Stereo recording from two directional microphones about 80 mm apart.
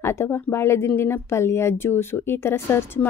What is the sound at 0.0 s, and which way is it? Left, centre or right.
Speech, left.